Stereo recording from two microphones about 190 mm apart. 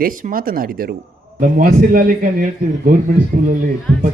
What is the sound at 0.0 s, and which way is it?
A man's voice, 45° right (ahead or behind).